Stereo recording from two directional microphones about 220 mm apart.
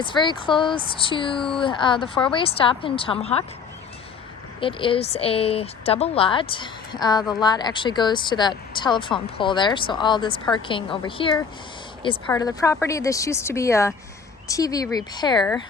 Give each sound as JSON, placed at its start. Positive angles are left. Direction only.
{"t": 0.0, "sound": "speech", "side_deg": 20}
{"t": 4.6, "sound": "speech", "side_deg": 25}